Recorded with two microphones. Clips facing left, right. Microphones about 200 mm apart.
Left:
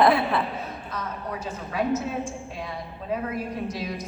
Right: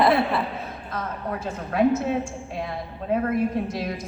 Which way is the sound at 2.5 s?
55° right (ahead or behind).